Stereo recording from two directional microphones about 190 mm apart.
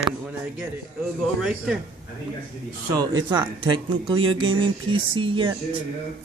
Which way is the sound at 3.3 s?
25° right (ahead or behind).